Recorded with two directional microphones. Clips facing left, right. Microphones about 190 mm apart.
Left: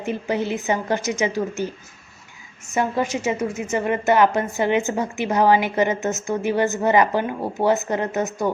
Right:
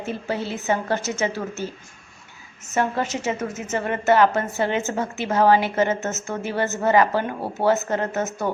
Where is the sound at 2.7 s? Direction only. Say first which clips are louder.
Left 1 dB; 15° left (ahead or behind).